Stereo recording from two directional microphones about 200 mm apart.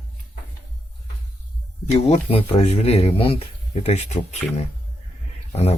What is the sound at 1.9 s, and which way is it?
Speech, 35° left (ahead or behind).